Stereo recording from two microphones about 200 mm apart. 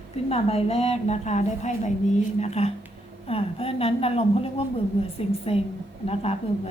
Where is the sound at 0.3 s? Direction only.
30° left (ahead or behind).